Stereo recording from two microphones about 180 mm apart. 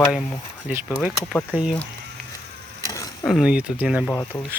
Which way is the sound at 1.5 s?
10° right (ahead or behind).